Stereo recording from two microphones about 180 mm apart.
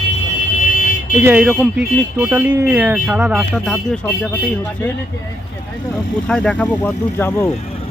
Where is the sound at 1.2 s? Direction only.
10° right (ahead or behind).